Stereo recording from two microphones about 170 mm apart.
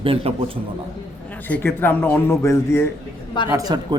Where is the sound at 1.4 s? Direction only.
10° left (ahead or behind).